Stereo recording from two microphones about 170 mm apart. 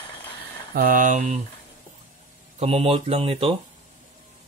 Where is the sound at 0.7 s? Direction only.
55° right (ahead or behind).